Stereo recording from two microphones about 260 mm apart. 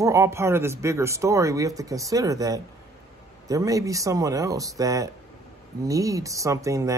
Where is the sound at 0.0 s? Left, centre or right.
Centre.